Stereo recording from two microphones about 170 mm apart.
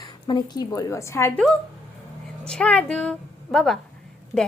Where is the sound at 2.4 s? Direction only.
5° left (ahead or behind).